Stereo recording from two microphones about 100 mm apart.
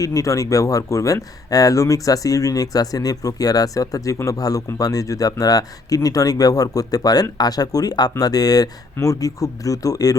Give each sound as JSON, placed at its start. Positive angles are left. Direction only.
{"t": 0.0, "sound": "speech", "side_deg": 35}